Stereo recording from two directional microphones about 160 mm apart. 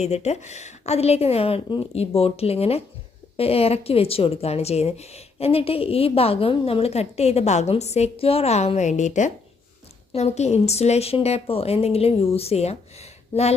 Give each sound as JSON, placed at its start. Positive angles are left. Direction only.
{"t": 0.0, "sound": "speech", "side_deg": 45}